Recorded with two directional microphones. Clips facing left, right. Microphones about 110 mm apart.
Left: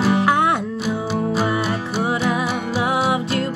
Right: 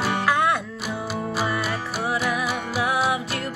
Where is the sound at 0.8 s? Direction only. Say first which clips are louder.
Left 6 dB; 5° right (ahead or behind).